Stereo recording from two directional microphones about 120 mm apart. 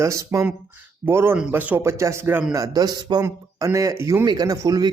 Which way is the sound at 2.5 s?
30° right (ahead or behind).